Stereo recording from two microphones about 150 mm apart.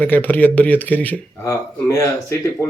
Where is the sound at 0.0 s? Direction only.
10° left (ahead or behind).